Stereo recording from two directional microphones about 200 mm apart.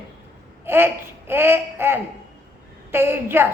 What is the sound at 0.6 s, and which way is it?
Babbling, 10° right (ahead or behind).